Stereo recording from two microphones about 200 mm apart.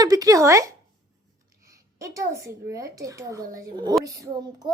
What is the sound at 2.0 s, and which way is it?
Speech, 15° right (ahead or behind).